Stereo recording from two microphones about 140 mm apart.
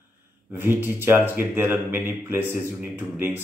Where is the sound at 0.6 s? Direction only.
15° right (ahead or behind).